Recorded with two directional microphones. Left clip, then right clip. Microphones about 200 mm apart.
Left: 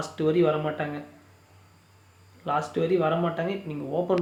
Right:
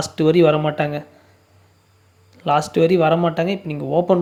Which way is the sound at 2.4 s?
40° right (ahead or behind).